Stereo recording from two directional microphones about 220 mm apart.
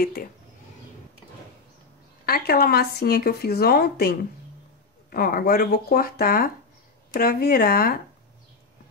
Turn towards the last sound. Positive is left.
turn(degrees=40)  # may be behind; listen again after turning